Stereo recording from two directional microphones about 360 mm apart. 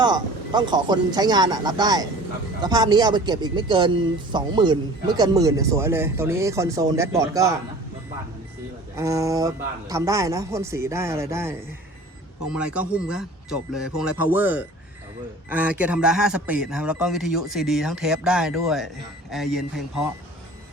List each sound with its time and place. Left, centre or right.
0.0 s speech: centre
9.0 s speech: centre
12.5 s speech: centre